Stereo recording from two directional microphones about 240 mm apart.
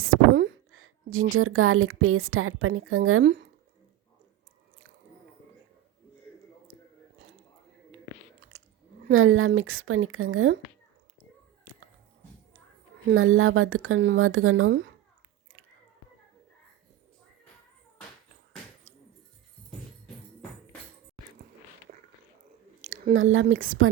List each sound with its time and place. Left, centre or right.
0.0 s a sound: right
1.4 s speech: right
9.1 s speech: right
11.6 s a sound: right
13.1 s speech: right
22.8 s speech: right